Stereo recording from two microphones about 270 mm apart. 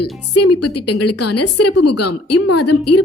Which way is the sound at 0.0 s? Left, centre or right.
Left.